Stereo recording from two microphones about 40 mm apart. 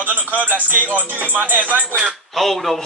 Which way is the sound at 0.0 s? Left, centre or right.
Right.